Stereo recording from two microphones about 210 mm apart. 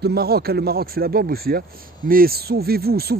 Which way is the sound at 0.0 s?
50° right (ahead or behind).